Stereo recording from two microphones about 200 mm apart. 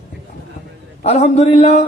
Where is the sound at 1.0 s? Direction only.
35° left (ahead or behind).